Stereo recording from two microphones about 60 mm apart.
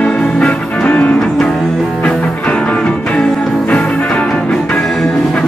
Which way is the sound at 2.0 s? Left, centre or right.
Centre.